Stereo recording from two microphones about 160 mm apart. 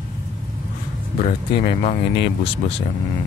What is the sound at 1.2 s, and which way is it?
Speech, 40° left (ahead or behind).